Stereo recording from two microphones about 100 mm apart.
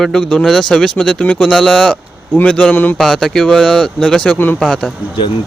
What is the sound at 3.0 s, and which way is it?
Speech, centre (ahead or behind).